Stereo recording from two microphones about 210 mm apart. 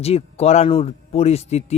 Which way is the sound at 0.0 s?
30° left (ahead or behind).